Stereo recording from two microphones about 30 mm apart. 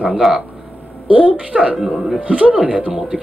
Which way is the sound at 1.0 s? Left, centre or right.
Right.